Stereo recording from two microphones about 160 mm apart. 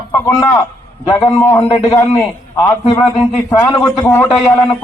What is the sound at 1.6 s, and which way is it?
Speech, 40° left (ahead or behind).